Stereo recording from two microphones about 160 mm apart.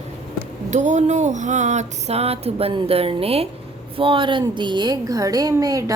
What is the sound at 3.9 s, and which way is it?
A woman's voice, 35° right (ahead or behind).